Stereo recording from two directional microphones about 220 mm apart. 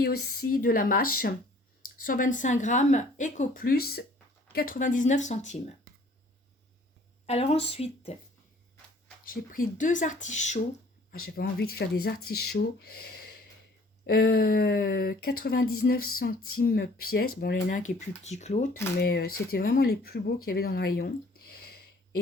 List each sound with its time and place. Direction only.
0.0 s speech: 45° left (ahead or behind)
2.0 s speech: 35° left (ahead or behind)
7.3 s speech: 25° left (ahead or behind)
9.2 s speech: 40° left (ahead or behind)
11.1 s speech: 45° left (ahead or behind)
18.9 s speech: 45° left (ahead or behind)